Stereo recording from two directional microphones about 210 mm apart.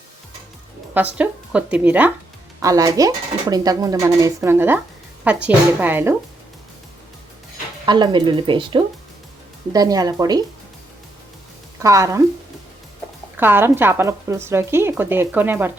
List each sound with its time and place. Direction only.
0.9 s speech: 5° right (ahead or behind)
7.9 s speech: 20° right (ahead or behind)
11.8 s speech: 15° right (ahead or behind)
13.3 s speech: 10° right (ahead or behind)